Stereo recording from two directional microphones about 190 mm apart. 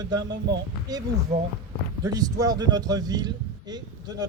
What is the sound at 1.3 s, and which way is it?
Speech, 35° right (ahead or behind).